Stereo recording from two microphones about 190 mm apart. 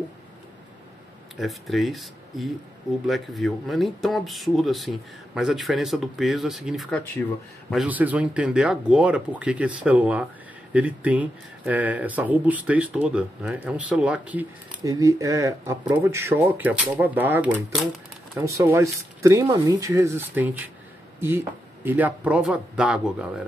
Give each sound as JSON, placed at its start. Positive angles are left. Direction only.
{"t": 1.3, "sound": "speech", "side_deg": 0}
{"t": 7.7, "sound": "speech", "side_deg": -5}
{"t": 14.8, "sound": "speech", "side_deg": -15}